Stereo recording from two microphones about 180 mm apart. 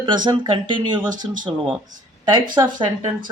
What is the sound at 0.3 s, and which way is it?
Speech, 25° right (ahead or behind).